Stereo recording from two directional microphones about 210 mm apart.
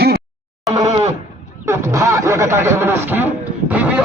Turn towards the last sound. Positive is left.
turn(degrees=-10)  # may be behind; listen again after turning